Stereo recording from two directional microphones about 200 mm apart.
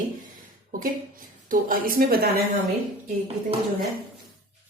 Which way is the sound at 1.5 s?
45° right (ahead or behind).